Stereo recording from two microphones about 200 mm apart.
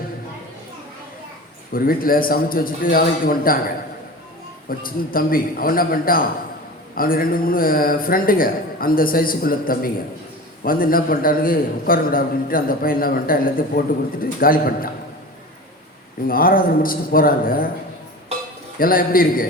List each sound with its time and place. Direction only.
1.7 s a man's voice: 45° left (ahead or behind)
4.8 s a man's voice: 45° left (ahead or behind)
16.2 s a man's voice: 45° left (ahead or behind)
18.8 s a man's voice: 45° left (ahead or behind)